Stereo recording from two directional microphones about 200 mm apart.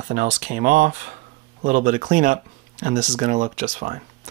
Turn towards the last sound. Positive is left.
turn(degrees=-35)  # may be behind; listen again after turning